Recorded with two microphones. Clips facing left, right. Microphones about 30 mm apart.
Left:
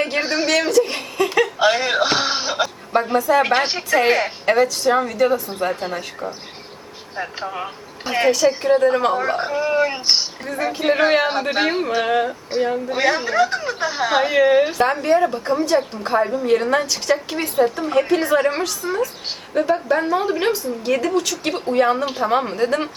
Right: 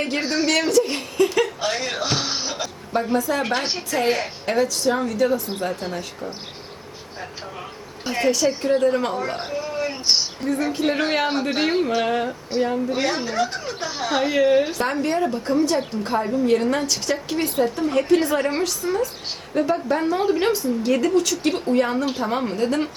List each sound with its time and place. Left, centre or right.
0.0 s a woman's voice: centre
1.5 s a woman's voice: left
7.2 s speech: left
7.6 s speech: left
8.3 s a woman's voice: centre